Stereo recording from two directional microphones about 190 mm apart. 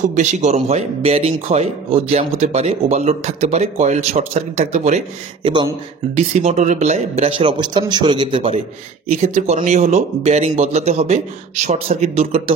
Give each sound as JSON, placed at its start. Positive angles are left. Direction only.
{"t": 0.1, "sound": "speech", "side_deg": -35}
{"t": 5.5, "sound": "a man's voice", "side_deg": -25}